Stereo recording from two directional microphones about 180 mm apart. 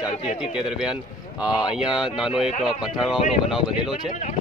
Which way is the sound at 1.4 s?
5° right (ahead or behind).